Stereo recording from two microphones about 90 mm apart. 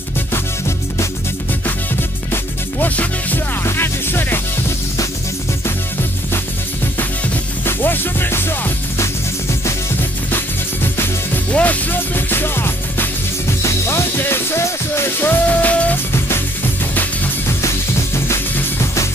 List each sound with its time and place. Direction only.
2.3 s music: 20° left (ahead or behind)
7.6 s music: 25° left (ahead or behind)
11.5 s music: 15° left (ahead or behind)